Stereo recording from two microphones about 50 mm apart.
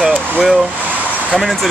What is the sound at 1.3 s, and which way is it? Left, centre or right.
Speech, centre.